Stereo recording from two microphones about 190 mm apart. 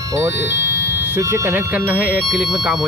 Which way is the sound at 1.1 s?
10° right (ahead or behind).